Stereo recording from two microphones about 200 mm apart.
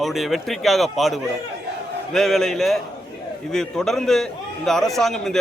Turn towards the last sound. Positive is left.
turn(degrees=0)  # may be behind; listen again after turning